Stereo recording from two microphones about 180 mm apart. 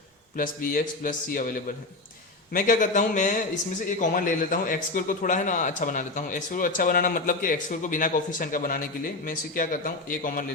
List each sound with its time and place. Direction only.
0.3 s a man's voice: 50° left (ahead or behind)